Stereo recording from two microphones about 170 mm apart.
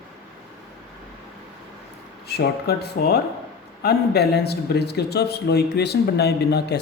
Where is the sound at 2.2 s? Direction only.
70° left (ahead or behind).